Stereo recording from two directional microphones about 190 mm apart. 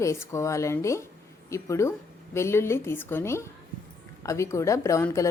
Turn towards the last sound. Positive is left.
turn(degrees=15)  # may be behind; listen again after turning